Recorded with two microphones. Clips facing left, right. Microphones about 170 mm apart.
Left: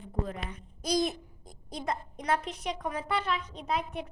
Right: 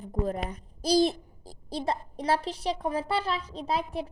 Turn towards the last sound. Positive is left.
turn(degrees=-30)  # may be behind; listen again after turning